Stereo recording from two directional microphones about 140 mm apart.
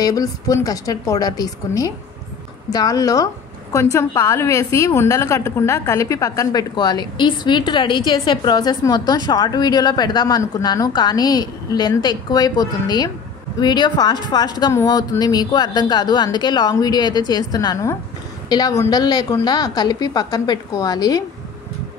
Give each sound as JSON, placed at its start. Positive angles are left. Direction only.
{"t": 0.0, "sound": "a woman's voice", "side_deg": 25}